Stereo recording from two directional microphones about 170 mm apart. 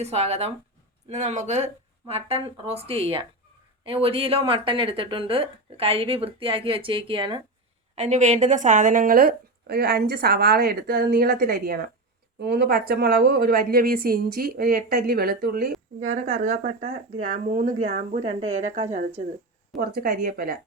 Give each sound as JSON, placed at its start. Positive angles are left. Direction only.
{"t": 0.0, "sound": "speech", "side_deg": -40}
{"t": 7.9, "sound": "a woman's voice", "side_deg": -45}
{"t": 12.4, "sound": "a woman's voice", "side_deg": -75}
{"t": 16.0, "sound": "speech", "side_deg": -45}
{"t": 18.2, "sound": "speech", "side_deg": -40}
{"t": 19.8, "sound": "a woman's voice", "side_deg": -60}